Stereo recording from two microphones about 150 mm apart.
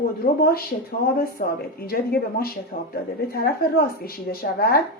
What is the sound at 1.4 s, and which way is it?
Speech, 90° left.